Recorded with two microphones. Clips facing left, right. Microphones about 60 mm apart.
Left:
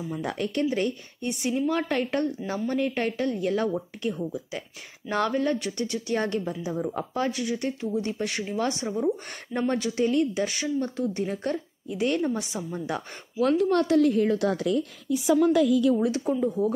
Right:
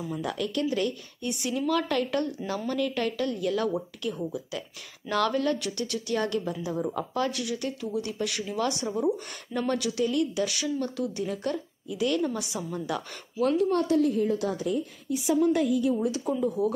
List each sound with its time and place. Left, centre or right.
0.2 s a woman's voice: left
6.5 s a woman's voice: left
13.4 s a woman's voice: left
16.6 s a woman's voice: left